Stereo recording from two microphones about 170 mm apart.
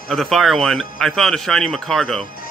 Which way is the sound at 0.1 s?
Centre (ahead or behind).